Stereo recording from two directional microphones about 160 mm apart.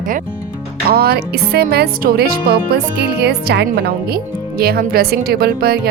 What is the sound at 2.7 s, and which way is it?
Speech, 90° right.